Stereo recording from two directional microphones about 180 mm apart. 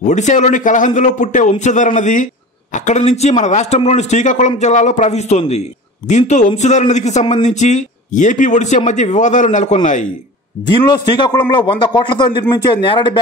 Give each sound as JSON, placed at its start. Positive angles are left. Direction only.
{"t": 0.1, "sound": "a man's voice", "side_deg": 40}
{"t": 10.8, "sound": "a man's voice", "side_deg": 20}